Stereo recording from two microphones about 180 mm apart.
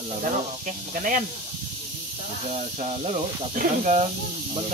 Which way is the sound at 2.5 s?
35° right (ahead or behind).